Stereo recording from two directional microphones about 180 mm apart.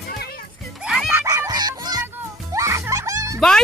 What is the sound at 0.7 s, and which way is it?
Music, centre (ahead or behind).